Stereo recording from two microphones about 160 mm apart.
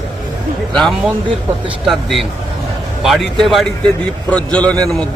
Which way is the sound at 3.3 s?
Centre (ahead or behind).